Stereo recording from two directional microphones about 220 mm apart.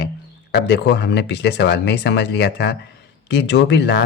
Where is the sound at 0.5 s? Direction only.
50° left (ahead or behind).